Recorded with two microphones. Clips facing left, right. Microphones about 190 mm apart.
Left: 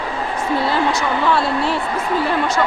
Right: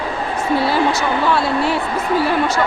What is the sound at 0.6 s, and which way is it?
A woman's voice, 5° right (ahead or behind).